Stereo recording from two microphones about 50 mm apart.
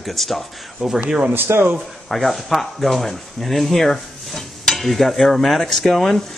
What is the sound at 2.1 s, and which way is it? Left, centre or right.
A man's voice, centre.